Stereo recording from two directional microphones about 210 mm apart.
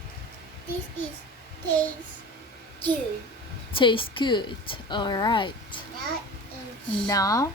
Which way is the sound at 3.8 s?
25° left (ahead or behind).